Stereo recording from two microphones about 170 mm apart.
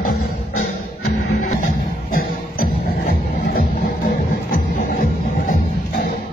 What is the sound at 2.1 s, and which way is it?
Music, 55° left (ahead or behind).